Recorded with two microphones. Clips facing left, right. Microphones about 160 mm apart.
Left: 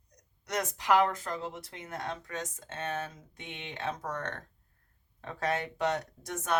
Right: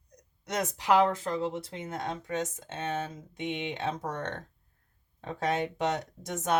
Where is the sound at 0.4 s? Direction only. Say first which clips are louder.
Right 2 dB; 25° right (ahead or behind).